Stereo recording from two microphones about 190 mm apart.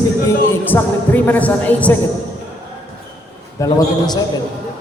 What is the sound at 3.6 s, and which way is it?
Speech, 20° left (ahead or behind).